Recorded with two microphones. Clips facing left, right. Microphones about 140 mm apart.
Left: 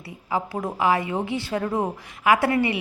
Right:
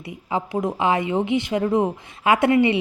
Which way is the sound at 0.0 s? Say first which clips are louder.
Right 1 dB; 20° right (ahead or behind).